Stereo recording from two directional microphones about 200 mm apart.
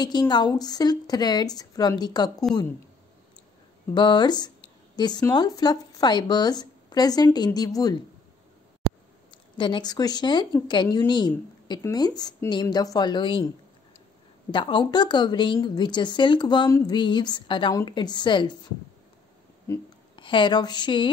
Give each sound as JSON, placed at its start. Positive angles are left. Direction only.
{"t": 0.0, "sound": "a woman's voice", "side_deg": 20}
{"t": 3.9, "sound": "a woman's voice", "side_deg": 20}
{"t": 9.3, "sound": "a woman's voice", "side_deg": 25}
{"t": 14.5, "sound": "a woman's voice", "side_deg": 25}
{"t": 19.7, "sound": "a sound", "side_deg": 15}
{"t": 20.2, "sound": "a woman's voice", "side_deg": 25}